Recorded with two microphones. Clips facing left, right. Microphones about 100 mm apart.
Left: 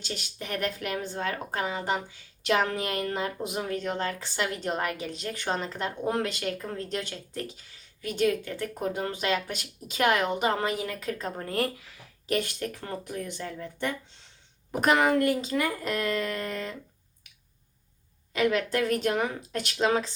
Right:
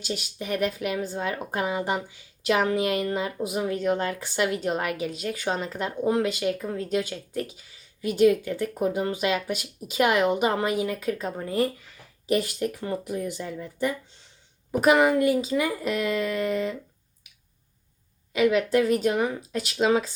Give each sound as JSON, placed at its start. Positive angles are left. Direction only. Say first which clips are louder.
{"t": 0.0, "sound": "speech", "louder": "right 5 dB", "side_deg": -10}
{"t": 3.8, "sound": "speech", "louder": "right 5 dB", "side_deg": -15}
{"t": 10.8, "sound": "speech", "louder": "right 6 dB", "side_deg": -20}
{"t": 11.2, "sound": "speech", "louder": "right 1 dB", "side_deg": -10}
{"t": 18.3, "sound": "speech", "louder": "right 4 dB", "side_deg": -10}